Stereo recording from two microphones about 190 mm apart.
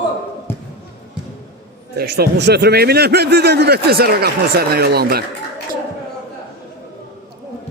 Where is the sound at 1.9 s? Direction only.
55° right (ahead or behind).